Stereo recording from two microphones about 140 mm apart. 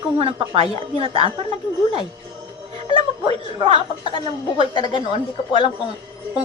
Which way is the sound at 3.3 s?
45° right (ahead or behind).